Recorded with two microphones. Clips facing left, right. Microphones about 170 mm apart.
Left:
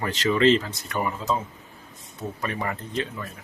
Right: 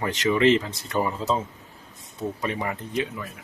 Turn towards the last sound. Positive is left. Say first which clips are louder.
# right 2 dB
turn(degrees=-15)  # may be behind; listen again after turning